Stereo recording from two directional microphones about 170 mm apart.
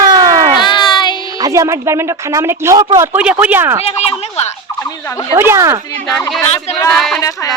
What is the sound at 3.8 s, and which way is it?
Speech, 40° left (ahead or behind).